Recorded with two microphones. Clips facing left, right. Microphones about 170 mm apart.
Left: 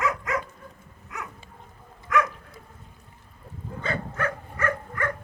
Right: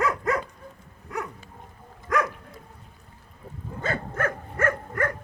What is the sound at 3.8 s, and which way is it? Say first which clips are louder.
Dog: right 2 dB; 45° right (ahead or behind).